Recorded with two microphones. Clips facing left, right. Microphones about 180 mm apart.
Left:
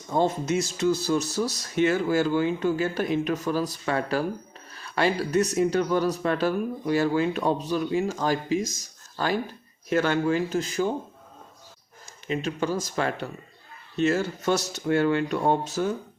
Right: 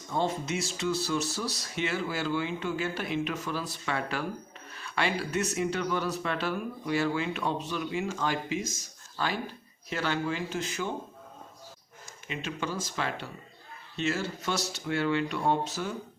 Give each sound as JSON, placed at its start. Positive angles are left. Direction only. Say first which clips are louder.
{"t": 0.1, "sound": "speech", "louder": "left 6 dB", "side_deg": 45}
{"t": 12.3, "sound": "speech", "louder": "left 8 dB", "side_deg": 40}